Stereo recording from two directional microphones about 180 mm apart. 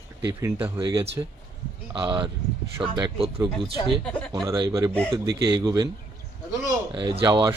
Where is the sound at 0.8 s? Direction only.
25° right (ahead or behind).